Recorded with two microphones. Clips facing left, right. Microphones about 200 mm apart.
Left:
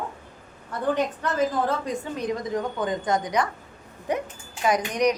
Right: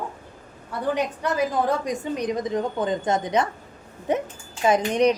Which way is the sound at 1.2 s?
15° right (ahead or behind).